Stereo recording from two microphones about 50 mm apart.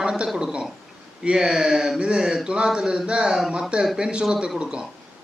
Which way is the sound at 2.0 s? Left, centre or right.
Centre.